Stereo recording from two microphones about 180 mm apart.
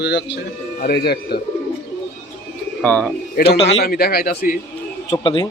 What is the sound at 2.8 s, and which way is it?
Speech, 5° left (ahead or behind).